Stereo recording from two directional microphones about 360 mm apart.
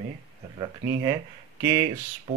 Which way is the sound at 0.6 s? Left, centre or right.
Centre.